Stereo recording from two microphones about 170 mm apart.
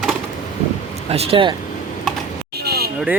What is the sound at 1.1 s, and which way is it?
Speech, 30° right (ahead or behind).